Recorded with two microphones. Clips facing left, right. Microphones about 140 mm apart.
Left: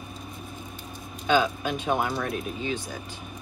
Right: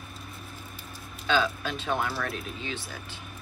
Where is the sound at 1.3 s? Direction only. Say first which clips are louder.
Left 3 dB; 15° left (ahead or behind).